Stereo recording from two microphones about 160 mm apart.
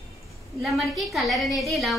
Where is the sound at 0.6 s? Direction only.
Centre (ahead or behind).